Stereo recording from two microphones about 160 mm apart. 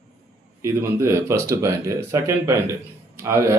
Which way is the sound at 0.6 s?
15° right (ahead or behind).